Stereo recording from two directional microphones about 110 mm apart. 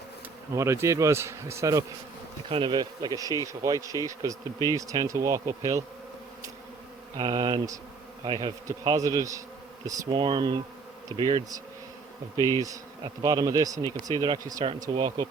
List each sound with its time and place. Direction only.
0.5 s speech: 25° right (ahead or behind)
2.5 s speech: 50° right (ahead or behind); by 5.8 s 30° right (ahead or behind)
7.2 s speech: 40° right (ahead or behind)
10.1 s speech: 50° right (ahead or behind); by 14.6 s 35° right (ahead or behind)
14.8 s speech: 45° right (ahead or behind)